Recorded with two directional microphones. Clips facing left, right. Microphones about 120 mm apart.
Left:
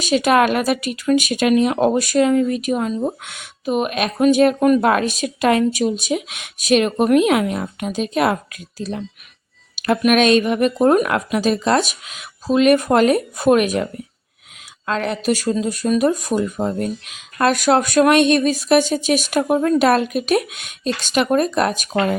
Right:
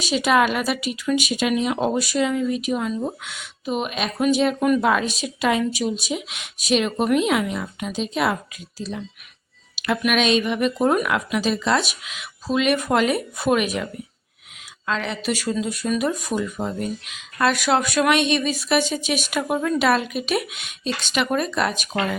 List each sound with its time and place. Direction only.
0.0 s speech: 55° left (ahead or behind)
9.7 s a sound: 45° left (ahead or behind)
10.1 s speech: 50° left (ahead or behind)
14.8 s speech: 45° left (ahead or behind)